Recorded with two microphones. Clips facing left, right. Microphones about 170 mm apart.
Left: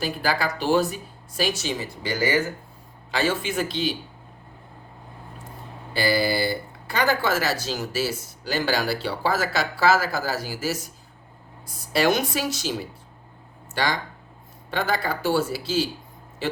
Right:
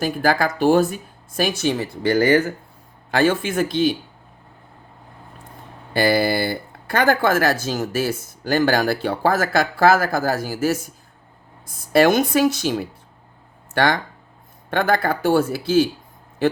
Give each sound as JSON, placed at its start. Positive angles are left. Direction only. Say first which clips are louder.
{"t": 0.0, "sound": "speech", "louder": "right 6 dB", "side_deg": -50}
{"t": 5.9, "sound": "speech", "louder": "right 4 dB", "side_deg": -55}
{"t": 16.4, "sound": "a sound", "louder": "right 8 dB", "side_deg": -50}